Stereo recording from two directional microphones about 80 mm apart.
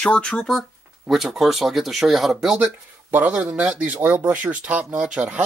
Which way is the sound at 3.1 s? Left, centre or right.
Right.